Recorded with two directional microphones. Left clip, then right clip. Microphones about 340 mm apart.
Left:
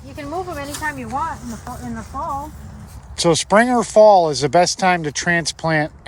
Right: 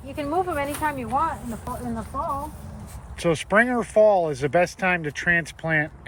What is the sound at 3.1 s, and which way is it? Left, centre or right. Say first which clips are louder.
Speech: left 6 dB; centre.